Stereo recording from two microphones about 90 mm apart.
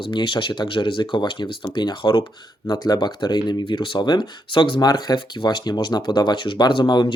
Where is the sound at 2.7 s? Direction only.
50° left (ahead or behind).